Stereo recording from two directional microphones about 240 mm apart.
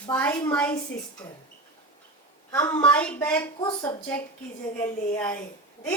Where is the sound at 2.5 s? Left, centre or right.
Centre.